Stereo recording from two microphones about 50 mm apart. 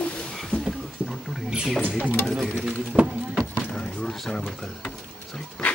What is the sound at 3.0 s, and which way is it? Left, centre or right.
Speech, right.